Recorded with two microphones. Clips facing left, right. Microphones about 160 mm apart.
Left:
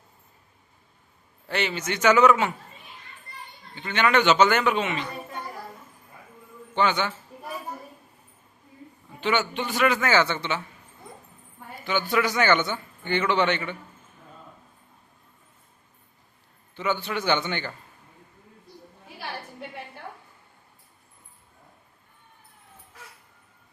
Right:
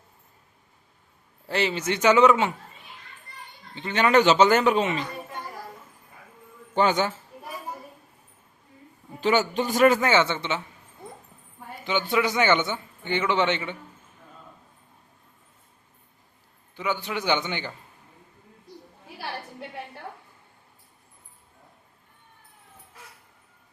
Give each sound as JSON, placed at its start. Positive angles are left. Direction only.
{"t": 1.5, "sound": "speech", "side_deg": -30}
{"t": 3.8, "sound": "a man's voice", "side_deg": -30}
{"t": 6.7, "sound": "a man's voice", "side_deg": -40}
{"t": 9.2, "sound": "a man's voice", "side_deg": -40}
{"t": 10.1, "sound": "speech", "side_deg": -20}
{"t": 11.9, "sound": "a man's voice", "side_deg": -20}
{"t": 16.7, "sound": "a man's voice", "side_deg": -10}